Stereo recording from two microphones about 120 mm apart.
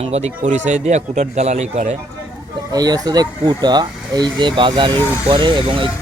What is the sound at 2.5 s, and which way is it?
Speech, 35° right (ahead or behind).